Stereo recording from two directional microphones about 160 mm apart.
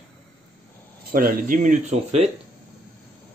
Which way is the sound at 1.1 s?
65° right (ahead or behind).